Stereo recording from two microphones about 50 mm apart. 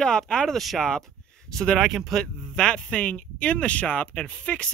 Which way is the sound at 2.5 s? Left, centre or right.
Centre.